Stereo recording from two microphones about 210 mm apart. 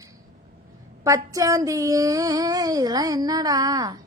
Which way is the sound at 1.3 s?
15° right (ahead or behind).